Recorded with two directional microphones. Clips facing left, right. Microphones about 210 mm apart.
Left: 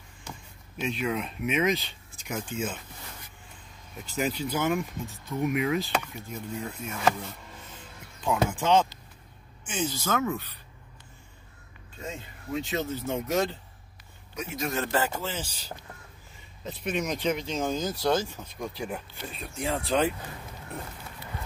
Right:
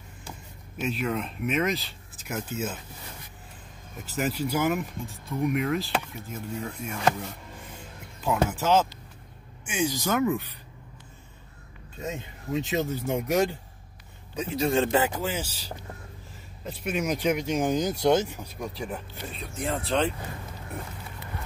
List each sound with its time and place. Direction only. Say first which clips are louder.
0.7 s speech: right 1 dB; centre (ahead or behind)
4.0 s speech: right 1 dB; 5° right (ahead or behind)
8.2 s speech: right 1 dB; 5° right (ahead or behind)
12.0 s speech: right 4 dB; 20° right (ahead or behind)
14.3 s speech: right 6 dB; 30° right (ahead or behind)
15.2 s speech: right 4 dB; 10° right (ahead or behind)
18.3 s speech: right 1 dB; 5° right (ahead or behind)